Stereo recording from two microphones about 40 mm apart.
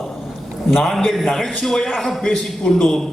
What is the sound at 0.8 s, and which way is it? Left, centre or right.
A man's voice, centre.